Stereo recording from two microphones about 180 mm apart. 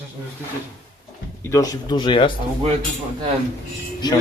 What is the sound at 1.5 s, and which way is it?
Speech, 20° left (ahead or behind).